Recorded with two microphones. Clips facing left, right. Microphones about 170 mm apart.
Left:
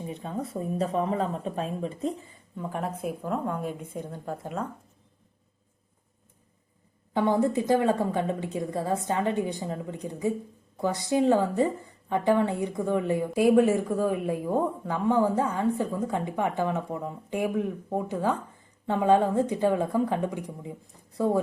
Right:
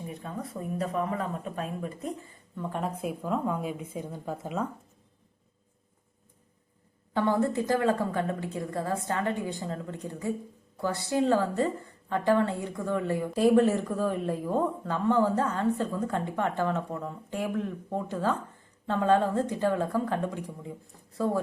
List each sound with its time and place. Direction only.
0.0 s speech: 25° left (ahead or behind)
2.6 s speech: 5° left (ahead or behind)
7.1 s a woman's voice: 15° left (ahead or behind)